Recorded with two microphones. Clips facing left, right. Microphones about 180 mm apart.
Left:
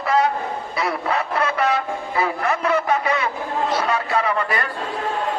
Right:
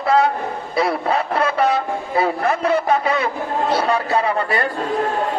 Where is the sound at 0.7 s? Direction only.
30° right (ahead or behind).